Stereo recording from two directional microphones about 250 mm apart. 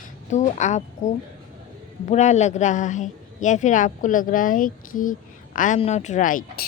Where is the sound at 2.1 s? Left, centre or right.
Left.